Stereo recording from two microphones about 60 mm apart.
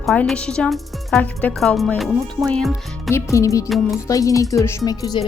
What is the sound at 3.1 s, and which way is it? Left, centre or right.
Speech, left.